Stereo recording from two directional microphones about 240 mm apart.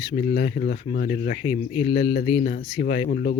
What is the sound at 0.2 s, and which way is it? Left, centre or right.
Speech, left.